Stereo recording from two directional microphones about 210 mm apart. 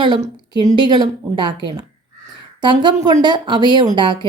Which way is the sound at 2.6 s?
20° right (ahead or behind).